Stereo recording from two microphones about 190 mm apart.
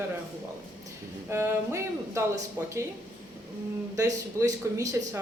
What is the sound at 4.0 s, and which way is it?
A woman's voice, 20° right (ahead or behind).